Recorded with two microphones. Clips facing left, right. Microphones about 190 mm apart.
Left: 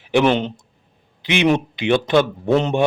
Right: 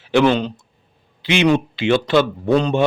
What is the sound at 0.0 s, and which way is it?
Speech, 15° left (ahead or behind).